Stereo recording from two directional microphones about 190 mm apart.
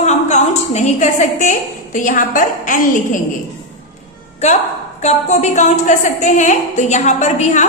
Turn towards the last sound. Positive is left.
turn(degrees=40)  # may be behind; listen again after turning